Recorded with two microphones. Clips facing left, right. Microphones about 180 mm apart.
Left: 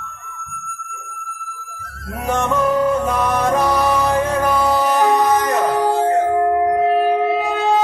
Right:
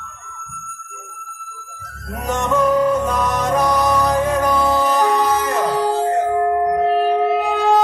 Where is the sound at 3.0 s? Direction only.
15° left (ahead or behind).